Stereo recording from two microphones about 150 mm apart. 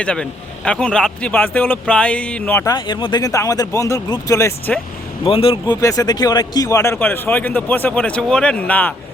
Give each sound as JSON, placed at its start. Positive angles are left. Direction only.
{"t": 0.0, "sound": "a man's voice", "side_deg": 5}
{"t": 2.7, "sound": "speech", "side_deg": 30}
{"t": 5.2, "sound": "a man's voice", "side_deg": 40}